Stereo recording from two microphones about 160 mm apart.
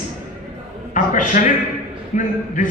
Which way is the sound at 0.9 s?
55° left (ahead or behind).